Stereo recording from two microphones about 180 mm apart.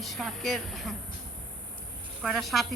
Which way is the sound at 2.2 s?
Centre (ahead or behind).